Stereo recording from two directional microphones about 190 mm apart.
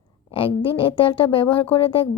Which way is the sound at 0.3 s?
25° left (ahead or behind).